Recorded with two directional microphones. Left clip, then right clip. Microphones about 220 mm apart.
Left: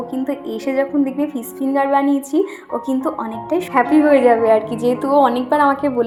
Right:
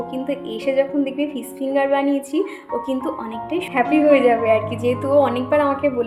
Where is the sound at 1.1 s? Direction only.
20° left (ahead or behind).